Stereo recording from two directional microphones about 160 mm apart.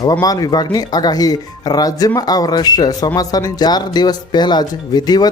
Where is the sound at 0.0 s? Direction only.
20° left (ahead or behind).